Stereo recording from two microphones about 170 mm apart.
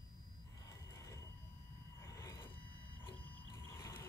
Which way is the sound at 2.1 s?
20° left (ahead or behind).